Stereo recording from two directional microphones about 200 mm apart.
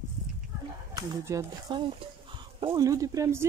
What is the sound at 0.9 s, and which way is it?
Speech, 15° right (ahead or behind).